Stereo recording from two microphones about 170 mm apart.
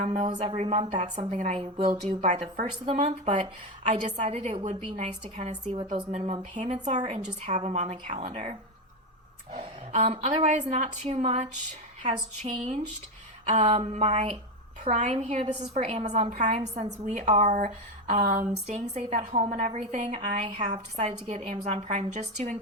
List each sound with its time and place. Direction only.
0.0 s speech: 40° right (ahead or behind)
1.8 s a woman's voice: 50° right (ahead or behind)
13.5 s a woman's voice: 40° right (ahead or behind)